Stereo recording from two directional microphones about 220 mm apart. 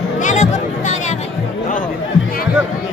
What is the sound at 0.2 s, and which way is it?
Music, 35° left (ahead or behind).